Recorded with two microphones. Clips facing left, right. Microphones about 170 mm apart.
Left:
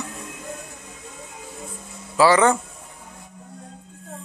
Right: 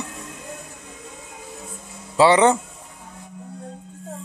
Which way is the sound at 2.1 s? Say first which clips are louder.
Right 1 dB; 25° right (ahead or behind).